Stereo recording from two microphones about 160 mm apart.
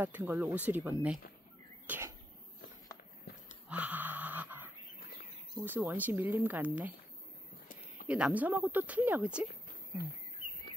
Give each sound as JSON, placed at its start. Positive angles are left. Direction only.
{"t": 0.0, "sound": "speech", "side_deg": -15}
{"t": 1.9, "sound": "bird", "side_deg": -15}
{"t": 3.3, "sound": "dog", "side_deg": 75}
{"t": 3.6, "sound": "a sound", "side_deg": -10}
{"t": 5.7, "sound": "speech", "side_deg": -15}
{"t": 7.6, "sound": "a sound", "side_deg": 55}
{"t": 8.1, "sound": "speech", "side_deg": -10}